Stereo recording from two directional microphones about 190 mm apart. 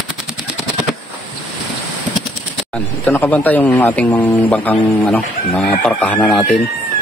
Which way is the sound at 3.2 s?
10° left (ahead or behind).